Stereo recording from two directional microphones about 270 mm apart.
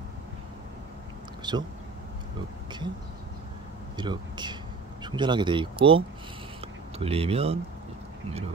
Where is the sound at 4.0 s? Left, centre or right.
Centre.